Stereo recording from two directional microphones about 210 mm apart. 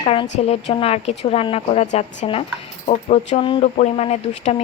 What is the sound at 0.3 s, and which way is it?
Speech, 30° left (ahead or behind).